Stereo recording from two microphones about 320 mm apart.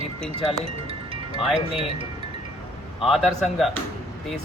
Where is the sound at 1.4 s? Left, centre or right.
Centre.